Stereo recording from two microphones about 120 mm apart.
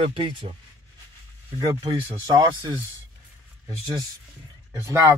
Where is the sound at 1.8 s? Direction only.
35° right (ahead or behind).